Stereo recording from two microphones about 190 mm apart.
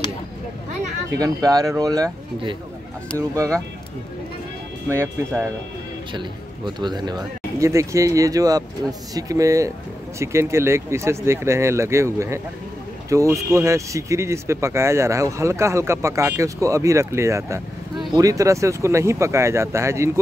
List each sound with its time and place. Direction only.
1.2 s speech: 20° right (ahead or behind)
4.8 s speech: 15° right (ahead or behind)
6.1 s speech: 25° right (ahead or behind)